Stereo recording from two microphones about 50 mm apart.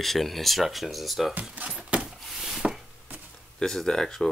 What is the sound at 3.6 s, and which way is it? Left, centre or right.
Speech, centre.